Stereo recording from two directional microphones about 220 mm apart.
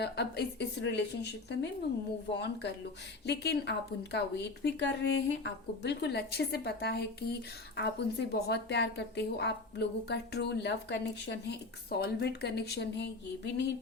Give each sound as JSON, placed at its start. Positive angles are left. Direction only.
{"t": 0.0, "sound": "a woman's voice", "side_deg": 50}